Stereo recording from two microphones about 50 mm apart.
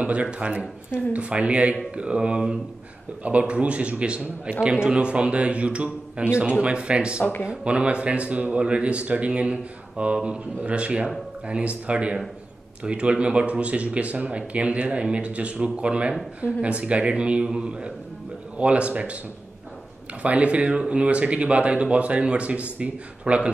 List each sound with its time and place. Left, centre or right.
0.0 s speech: right
20.2 s speech: right